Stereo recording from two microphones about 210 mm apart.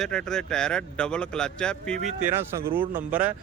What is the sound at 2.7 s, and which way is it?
Speech, 10° right (ahead or behind).